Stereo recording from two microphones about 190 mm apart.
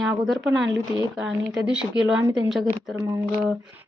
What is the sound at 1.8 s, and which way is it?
Speech, 5° right (ahead or behind).